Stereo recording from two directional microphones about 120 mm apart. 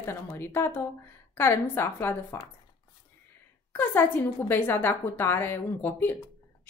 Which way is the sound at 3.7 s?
15° left (ahead or behind).